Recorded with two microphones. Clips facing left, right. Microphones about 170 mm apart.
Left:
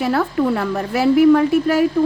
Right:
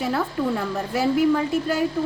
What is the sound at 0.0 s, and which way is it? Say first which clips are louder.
A woman's voice: left 6 dB; 70° left (ahead or behind).